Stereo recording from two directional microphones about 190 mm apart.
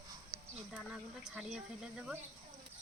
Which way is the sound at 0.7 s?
5° right (ahead or behind).